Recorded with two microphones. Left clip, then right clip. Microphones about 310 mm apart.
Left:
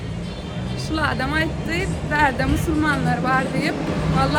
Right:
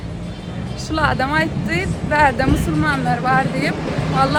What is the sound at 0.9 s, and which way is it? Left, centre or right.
Speech, centre.